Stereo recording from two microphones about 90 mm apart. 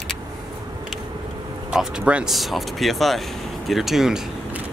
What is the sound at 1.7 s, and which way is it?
Speech, 10° right (ahead or behind).